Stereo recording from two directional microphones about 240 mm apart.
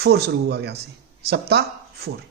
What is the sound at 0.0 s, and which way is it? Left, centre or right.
Speech, right.